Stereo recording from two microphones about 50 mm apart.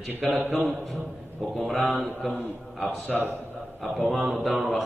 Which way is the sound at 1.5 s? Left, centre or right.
Centre.